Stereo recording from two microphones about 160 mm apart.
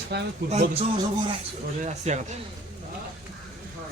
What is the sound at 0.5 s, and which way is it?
Speech, 35° right (ahead or behind).